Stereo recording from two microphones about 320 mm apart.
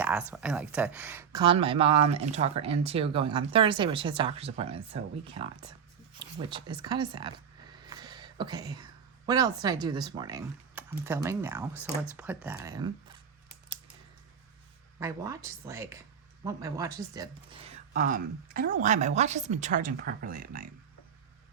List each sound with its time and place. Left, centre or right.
0.0 s speech: centre
7.9 s a sound: centre
9.2 s speech: centre
14.9 s speech: centre
17.7 s a woman's voice: right